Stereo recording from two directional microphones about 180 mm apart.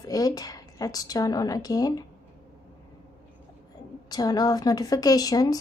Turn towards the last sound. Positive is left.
turn(degrees=20)  # may be behind; listen again after turning